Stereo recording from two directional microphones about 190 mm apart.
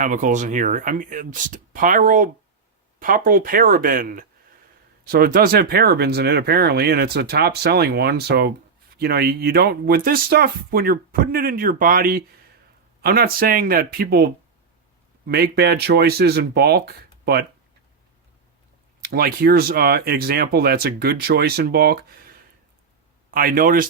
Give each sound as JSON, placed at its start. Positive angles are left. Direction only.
{"t": 0.0, "sound": "speech", "side_deg": -40}
{"t": 15.3, "sound": "speech", "side_deg": -55}
{"t": 19.0, "sound": "speech", "side_deg": -50}